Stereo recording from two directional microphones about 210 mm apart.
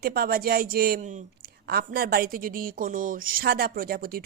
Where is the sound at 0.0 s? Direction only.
50° right (ahead or behind).